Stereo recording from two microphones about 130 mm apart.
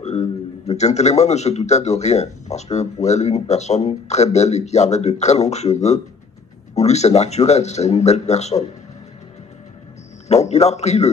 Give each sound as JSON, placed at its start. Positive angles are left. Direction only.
{"t": 0.0, "sound": "a man's voice", "side_deg": 55}
{"t": 10.2, "sound": "a man's voice", "side_deg": 60}